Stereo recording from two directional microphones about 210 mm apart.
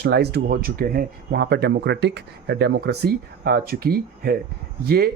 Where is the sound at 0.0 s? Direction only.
50° right (ahead or behind).